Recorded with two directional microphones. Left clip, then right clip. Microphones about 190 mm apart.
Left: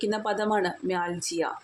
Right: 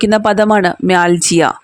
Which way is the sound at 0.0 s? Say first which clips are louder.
Right 16 dB; 50° right (ahead or behind).